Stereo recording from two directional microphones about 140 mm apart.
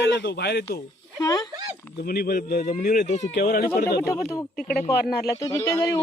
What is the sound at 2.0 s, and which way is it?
Speech, 90° left.